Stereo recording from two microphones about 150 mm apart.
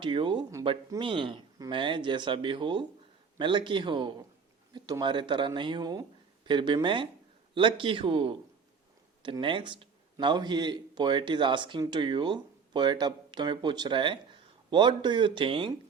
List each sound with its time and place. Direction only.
0.0 s a man's voice: 30° right (ahead or behind)